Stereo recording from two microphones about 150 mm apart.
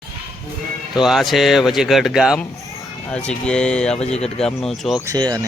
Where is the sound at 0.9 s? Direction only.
Centre (ahead or behind).